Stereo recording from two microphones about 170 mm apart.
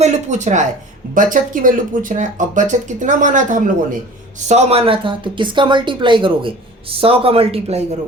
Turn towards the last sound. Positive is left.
turn(degrees=-40)  # may be behind; listen again after turning